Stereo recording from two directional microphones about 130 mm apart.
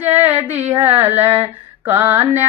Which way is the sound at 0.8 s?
15° right (ahead or behind).